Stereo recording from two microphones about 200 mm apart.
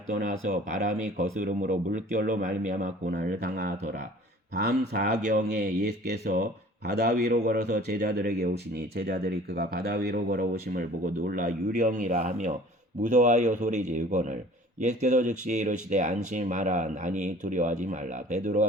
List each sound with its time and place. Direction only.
0.1 s speech: 40° right (ahead or behind)
5.1 s speech: 40° right (ahead or behind)
6.8 s speech: 55° right (ahead or behind); by 18.6 s 35° right (ahead or behind)